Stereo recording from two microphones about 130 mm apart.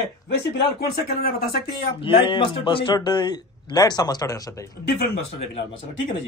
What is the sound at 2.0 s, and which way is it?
A man's voice, 40° left (ahead or behind).